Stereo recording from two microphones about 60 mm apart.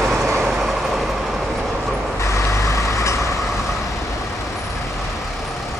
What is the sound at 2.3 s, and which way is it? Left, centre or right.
Vehicle, left.